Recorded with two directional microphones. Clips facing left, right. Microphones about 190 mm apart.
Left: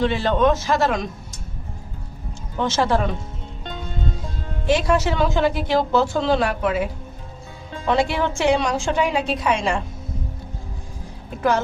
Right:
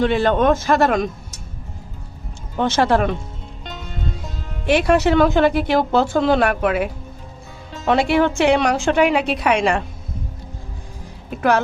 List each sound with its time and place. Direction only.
0.0 s speech: 55° right (ahead or behind)
2.6 s speech: 60° right (ahead or behind)
4.6 s speech: 65° right (ahead or behind)
7.9 s a woman's voice: 65° right (ahead or behind)
11.3 s speech: 70° right (ahead or behind)